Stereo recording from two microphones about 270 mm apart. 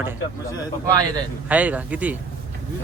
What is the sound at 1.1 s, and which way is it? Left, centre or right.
Speech, centre.